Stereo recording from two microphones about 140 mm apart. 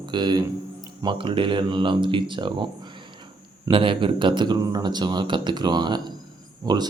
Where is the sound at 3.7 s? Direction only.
35° right (ahead or behind).